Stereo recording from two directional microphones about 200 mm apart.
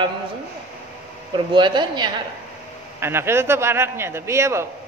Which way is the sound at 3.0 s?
10° right (ahead or behind).